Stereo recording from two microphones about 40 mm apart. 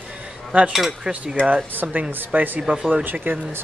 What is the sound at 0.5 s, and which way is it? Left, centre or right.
Speech, right.